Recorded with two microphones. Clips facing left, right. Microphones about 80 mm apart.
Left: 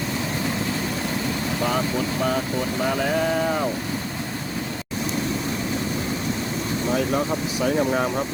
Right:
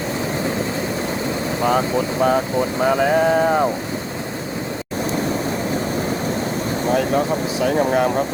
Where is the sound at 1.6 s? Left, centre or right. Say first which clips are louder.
Right 6 dB; right.